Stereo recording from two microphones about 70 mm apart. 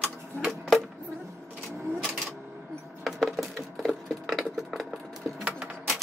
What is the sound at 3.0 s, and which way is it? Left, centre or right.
Wood, centre.